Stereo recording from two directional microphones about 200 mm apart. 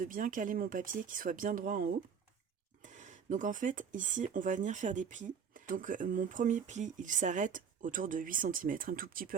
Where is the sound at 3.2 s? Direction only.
40° right (ahead or behind).